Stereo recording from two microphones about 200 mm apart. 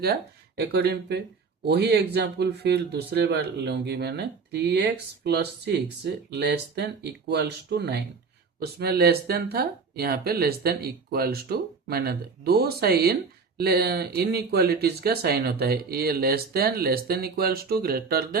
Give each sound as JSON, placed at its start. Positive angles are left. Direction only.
{"t": 0.0, "sound": "speech", "side_deg": -55}